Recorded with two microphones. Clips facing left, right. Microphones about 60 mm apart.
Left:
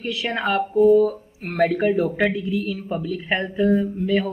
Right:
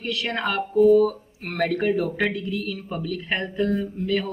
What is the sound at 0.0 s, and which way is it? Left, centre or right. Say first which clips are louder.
A woman's voice: left 2 dB; centre.